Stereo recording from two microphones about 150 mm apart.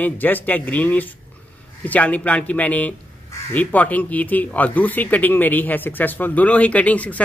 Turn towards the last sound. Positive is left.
turn(degrees=10)  # may be behind; listen again after turning